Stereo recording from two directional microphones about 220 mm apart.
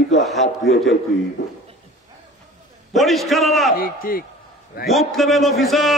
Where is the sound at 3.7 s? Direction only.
40° left (ahead or behind).